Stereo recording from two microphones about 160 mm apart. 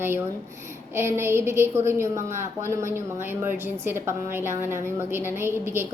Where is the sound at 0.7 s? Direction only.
15° right (ahead or behind).